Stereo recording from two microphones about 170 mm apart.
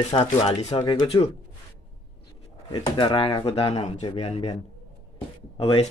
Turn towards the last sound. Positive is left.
turn(degrees=35)  # may be behind; listen again after turning